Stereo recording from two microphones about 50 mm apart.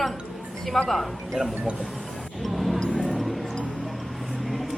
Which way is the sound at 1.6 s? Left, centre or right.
Centre.